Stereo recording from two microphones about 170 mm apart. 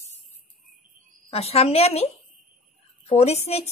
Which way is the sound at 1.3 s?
35° left (ahead or behind).